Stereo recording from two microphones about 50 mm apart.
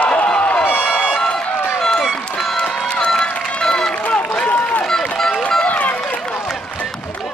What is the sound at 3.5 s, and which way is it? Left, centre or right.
Run, centre.